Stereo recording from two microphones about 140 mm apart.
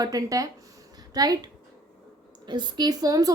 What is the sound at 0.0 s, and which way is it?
Speech, 25° right (ahead or behind).